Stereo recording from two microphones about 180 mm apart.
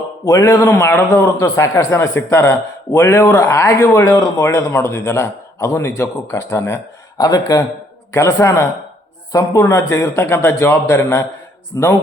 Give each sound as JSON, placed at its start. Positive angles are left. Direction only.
{"t": 0.3, "sound": "a man's voice", "side_deg": 20}